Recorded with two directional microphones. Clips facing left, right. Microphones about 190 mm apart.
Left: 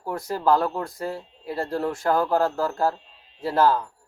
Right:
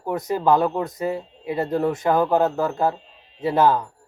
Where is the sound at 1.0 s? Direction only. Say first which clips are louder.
Right 5 dB; 5° right (ahead or behind).